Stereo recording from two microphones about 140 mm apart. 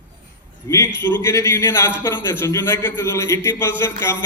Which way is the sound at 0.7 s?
20° left (ahead or behind).